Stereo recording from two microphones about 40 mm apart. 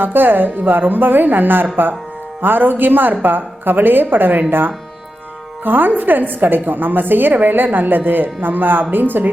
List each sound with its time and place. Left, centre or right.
0.0 s a woman's voice: right